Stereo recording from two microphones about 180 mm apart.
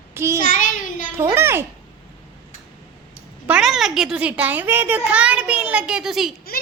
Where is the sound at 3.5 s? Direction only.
Centre (ahead or behind).